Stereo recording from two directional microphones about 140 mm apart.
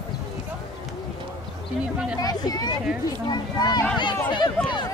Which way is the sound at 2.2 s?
25° left (ahead or behind).